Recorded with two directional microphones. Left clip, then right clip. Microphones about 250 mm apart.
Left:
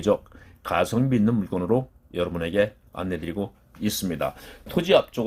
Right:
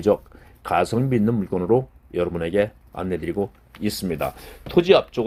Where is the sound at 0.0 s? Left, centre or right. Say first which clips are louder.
Right 3 dB; right.